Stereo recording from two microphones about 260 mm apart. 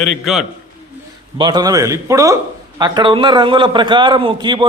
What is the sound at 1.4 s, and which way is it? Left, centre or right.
Speech, centre.